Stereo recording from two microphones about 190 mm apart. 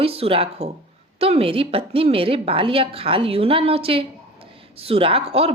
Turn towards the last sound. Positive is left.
turn(degrees=-30)  # may be behind; listen again after turning